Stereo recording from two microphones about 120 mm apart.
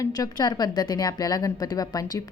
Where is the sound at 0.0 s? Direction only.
30° left (ahead or behind).